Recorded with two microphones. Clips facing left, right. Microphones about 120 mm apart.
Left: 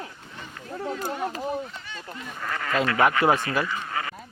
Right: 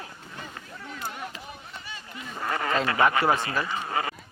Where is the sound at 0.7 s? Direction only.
40° left (ahead or behind).